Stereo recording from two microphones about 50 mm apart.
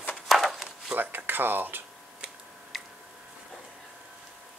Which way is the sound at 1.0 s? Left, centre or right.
Right.